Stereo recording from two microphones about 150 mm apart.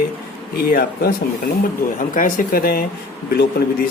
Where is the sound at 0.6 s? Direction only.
80° left.